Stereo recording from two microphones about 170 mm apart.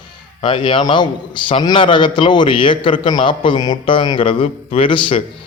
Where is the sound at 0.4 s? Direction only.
30° left (ahead or behind).